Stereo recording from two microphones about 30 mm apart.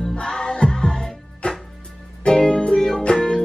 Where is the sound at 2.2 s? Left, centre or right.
Left.